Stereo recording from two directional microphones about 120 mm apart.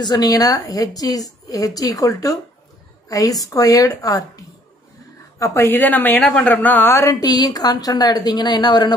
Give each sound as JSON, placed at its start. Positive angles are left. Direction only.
{"t": 0.0, "sound": "a woman's voice", "side_deg": 35}